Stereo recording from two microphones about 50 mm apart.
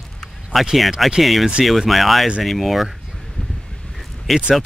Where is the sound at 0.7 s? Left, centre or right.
Centre.